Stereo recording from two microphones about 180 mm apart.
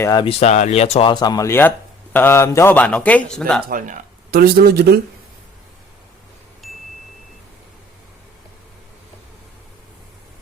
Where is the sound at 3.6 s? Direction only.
50° right (ahead or behind).